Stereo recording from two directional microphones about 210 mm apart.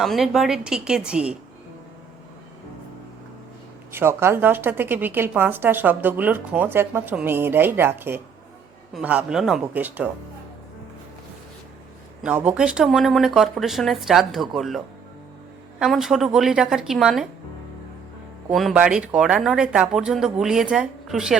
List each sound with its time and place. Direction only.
0.0 s speech: centre (ahead or behind)
3.9 s a woman's voice: 10° right (ahead or behind)
12.2 s speech: 5° right (ahead or behind)
15.8 s speech: centre (ahead or behind)
18.5 s speech: centre (ahead or behind)